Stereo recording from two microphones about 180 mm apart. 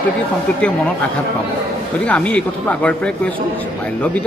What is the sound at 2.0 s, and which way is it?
Speech, 5° left (ahead or behind).